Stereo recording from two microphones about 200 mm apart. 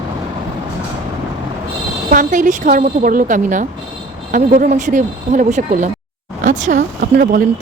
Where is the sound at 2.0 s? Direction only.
40° right (ahead or behind).